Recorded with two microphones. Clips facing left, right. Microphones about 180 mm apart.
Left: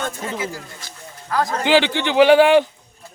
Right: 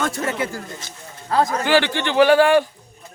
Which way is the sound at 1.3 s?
30° right (ahead or behind).